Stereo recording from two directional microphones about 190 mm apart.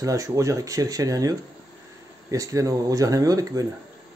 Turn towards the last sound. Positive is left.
turn(degrees=-20)  # may be behind; listen again after turning